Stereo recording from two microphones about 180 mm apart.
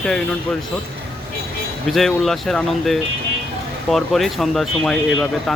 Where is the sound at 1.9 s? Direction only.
Centre (ahead or behind).